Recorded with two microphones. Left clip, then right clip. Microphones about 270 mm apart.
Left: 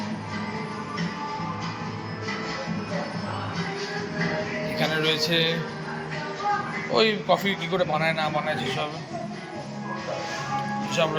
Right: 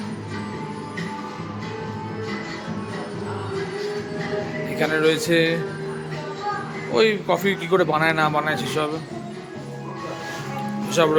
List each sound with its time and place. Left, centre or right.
4.8 s a man's voice: centre
6.9 s a man's voice: centre
10.9 s speech: centre